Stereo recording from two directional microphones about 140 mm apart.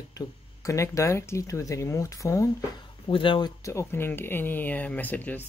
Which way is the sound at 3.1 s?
35° left (ahead or behind).